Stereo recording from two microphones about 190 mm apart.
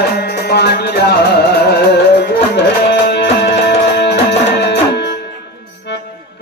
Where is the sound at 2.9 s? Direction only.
60° left (ahead or behind).